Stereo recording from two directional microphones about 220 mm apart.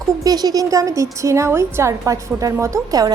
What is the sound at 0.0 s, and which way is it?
A woman's voice, 15° right (ahead or behind).